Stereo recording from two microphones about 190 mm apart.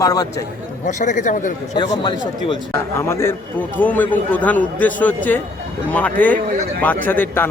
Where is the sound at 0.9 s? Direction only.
40° left (ahead or behind).